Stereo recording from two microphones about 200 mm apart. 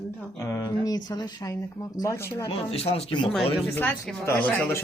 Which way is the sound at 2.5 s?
30° left (ahead or behind).